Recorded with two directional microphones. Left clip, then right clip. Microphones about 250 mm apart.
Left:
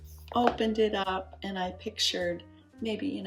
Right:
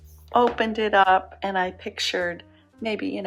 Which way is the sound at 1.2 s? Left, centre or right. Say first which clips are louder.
Right 10 dB; centre.